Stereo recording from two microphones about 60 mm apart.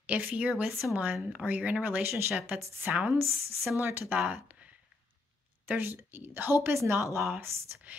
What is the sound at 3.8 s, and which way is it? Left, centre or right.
Speech, right.